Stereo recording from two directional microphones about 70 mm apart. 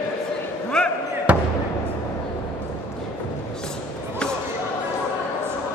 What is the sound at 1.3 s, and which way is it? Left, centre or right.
Basketball bounce, centre.